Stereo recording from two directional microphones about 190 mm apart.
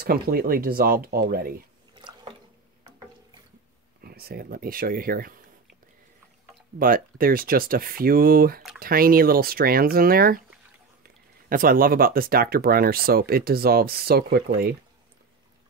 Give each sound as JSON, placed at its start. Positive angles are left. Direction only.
{"t": 0.0, "sound": "speech", "side_deg": -55}
{"t": 2.0, "sound": "squish", "side_deg": -25}
{"t": 4.0, "sound": "speech", "side_deg": -55}
{"t": 6.8, "sound": "speech", "side_deg": -50}
{"t": 11.4, "sound": "speech", "side_deg": -50}